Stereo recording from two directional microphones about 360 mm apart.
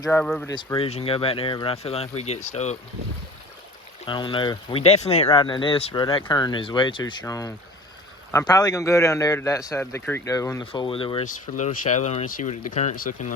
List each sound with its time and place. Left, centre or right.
0.0 s speech: centre
4.0 s speech: centre